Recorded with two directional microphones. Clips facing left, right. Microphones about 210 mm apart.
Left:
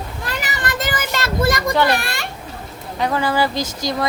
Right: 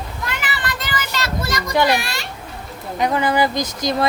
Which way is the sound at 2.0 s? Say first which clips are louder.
Left 1 dB; 55° left (ahead or behind).